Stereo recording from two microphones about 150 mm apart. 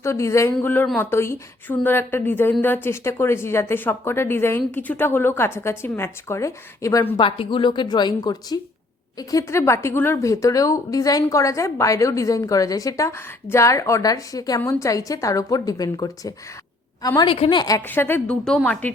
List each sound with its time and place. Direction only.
0.0 s a woman's voice: 20° left (ahead or behind)
7.2 s a woman's voice: 35° left (ahead or behind)
17.2 s a woman's voice: 40° left (ahead or behind)
17.8 s a woman's voice: 15° left (ahead or behind)